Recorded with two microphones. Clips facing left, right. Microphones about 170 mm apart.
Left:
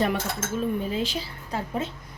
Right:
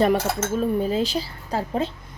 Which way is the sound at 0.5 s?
35° right (ahead or behind).